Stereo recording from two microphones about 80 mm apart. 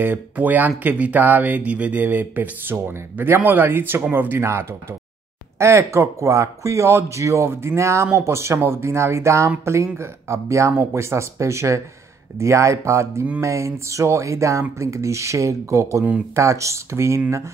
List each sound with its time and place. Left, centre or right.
0.0 s speech: right